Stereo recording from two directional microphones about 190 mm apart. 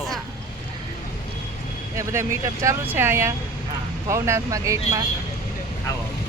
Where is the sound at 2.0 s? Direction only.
15° right (ahead or behind).